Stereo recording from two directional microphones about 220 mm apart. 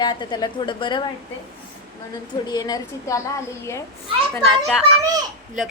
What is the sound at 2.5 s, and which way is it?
A woman's voice, 15° left (ahead or behind).